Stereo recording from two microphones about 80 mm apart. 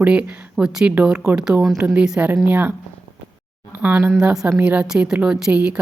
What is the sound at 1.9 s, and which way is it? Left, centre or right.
Speech, centre.